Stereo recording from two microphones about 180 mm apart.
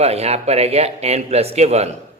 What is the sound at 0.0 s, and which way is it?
A man's voice, 35° right (ahead or behind).